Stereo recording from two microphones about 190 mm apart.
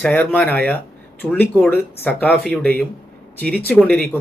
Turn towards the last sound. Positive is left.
turn(degrees=10)  # may be behind; listen again after turning